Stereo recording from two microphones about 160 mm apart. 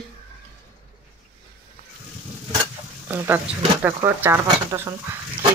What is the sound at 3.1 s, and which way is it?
Speech, 15° right (ahead or behind).